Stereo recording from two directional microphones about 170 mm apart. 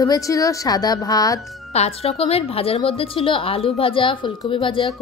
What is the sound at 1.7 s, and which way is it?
A woman's voice, 35° left (ahead or behind).